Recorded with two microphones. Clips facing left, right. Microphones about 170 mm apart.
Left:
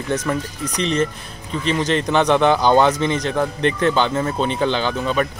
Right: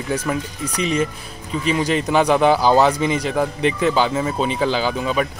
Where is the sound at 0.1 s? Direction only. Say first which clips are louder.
Left 1 dB; 10° right (ahead or behind).